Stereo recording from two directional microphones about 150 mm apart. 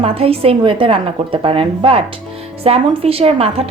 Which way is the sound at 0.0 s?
40° right (ahead or behind).